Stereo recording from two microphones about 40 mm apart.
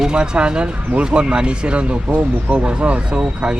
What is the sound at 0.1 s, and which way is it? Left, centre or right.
Speech, right.